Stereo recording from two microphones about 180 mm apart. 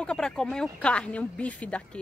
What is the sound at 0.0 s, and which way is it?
Speech, 5° left (ahead or behind).